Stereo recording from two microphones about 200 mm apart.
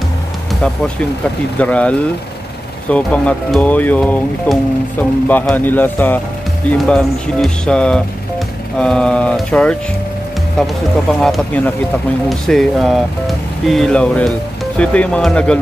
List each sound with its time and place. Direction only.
0.6 s speech: 5° left (ahead or behind)
11.1 s speech: centre (ahead or behind)